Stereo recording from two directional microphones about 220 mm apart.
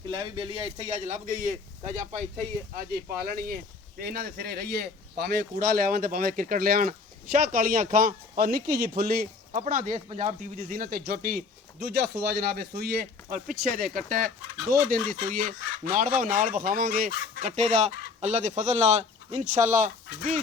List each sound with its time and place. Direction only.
0.1 s speech: 20° right (ahead or behind)